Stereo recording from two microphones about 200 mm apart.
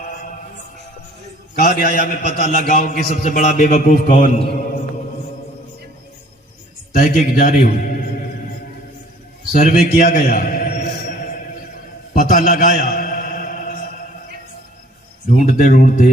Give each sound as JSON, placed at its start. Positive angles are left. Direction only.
{"t": 0.0, "sound": "music", "side_deg": 40}
{"t": 1.5, "sound": "a man's voice", "side_deg": 40}
{"t": 6.9, "sound": "a man's voice", "side_deg": 40}
{"t": 9.5, "sound": "a man's voice", "side_deg": 45}
{"t": 12.1, "sound": "a sound", "side_deg": 45}
{"t": 15.3, "sound": "a man's voice", "side_deg": 40}